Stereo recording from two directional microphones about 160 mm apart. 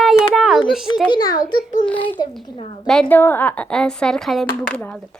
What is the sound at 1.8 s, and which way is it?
A child's voice, 10° left (ahead or behind).